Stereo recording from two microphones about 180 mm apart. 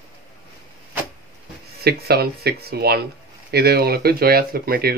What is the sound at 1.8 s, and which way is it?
Speech, 60° right (ahead or behind).